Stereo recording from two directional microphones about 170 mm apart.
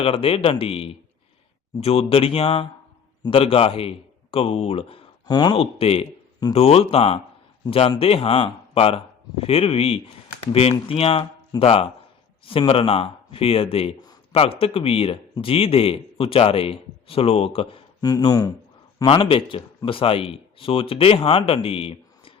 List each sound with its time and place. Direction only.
0.0 s a man's voice: 35° left (ahead or behind)
19.0 s speech: 30° left (ahead or behind)